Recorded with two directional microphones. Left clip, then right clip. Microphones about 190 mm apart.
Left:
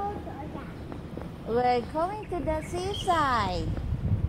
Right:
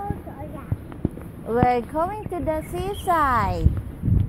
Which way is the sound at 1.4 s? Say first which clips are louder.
Right 5 dB; 40° right (ahead or behind).